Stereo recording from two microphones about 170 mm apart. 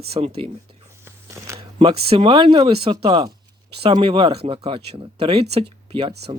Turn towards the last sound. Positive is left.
turn(degrees=-35)  # may be behind; listen again after turning